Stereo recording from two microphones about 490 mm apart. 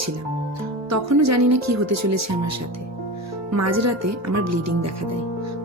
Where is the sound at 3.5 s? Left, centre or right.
Right.